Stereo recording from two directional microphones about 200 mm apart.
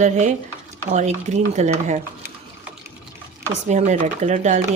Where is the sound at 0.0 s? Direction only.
35° right (ahead or behind).